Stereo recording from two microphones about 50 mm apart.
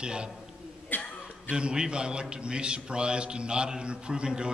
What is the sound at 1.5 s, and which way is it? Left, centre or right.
A man's voice, centre.